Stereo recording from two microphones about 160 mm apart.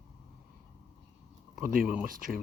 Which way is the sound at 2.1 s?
60° right (ahead or behind).